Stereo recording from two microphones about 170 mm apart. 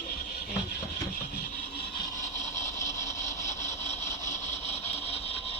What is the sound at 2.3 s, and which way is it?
Engine, 45° left (ahead or behind).